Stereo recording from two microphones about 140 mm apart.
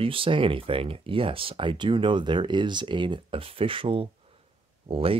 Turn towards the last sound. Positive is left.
turn(degrees=-40)  # may be behind; listen again after turning